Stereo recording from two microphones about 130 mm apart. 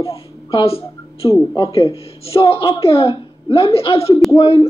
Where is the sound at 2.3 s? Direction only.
50° left (ahead or behind).